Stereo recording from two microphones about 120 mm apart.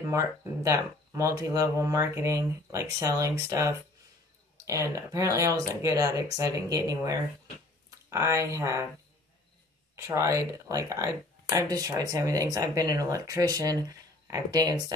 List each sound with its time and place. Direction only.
0.1 s speech: 25° right (ahead or behind)
9.9 s speech: 25° right (ahead or behind)